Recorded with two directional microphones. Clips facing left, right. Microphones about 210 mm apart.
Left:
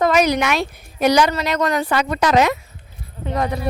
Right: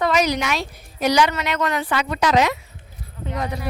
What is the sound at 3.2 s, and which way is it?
Speech, 65° left (ahead or behind).